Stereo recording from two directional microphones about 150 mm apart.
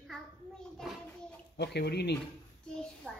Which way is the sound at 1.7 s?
90° left.